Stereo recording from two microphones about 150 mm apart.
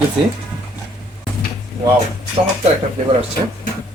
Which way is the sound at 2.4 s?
35° right (ahead or behind).